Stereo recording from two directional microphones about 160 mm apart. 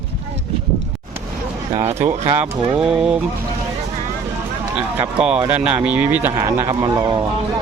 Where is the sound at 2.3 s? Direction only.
5° right (ahead or behind).